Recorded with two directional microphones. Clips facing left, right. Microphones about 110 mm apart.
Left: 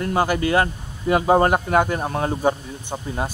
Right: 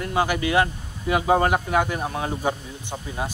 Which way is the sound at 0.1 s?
40° left (ahead or behind).